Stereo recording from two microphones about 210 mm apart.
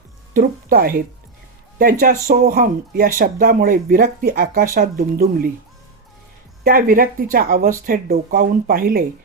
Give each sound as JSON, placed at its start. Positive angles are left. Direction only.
{"t": 0.3, "sound": "speech", "side_deg": -40}
{"t": 6.7, "sound": "speech", "side_deg": -45}